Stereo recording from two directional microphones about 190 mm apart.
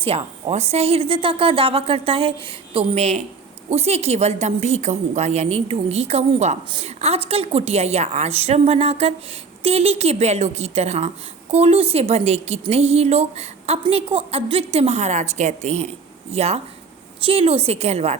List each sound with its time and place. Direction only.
0.0 s a woman's voice: 30° right (ahead or behind)